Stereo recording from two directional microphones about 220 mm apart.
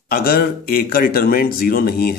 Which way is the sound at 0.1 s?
45° left (ahead or behind).